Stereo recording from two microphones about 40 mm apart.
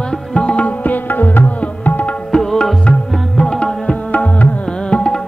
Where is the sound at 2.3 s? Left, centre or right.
Centre.